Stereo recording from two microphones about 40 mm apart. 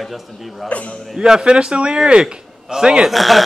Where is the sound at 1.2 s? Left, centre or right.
Centre.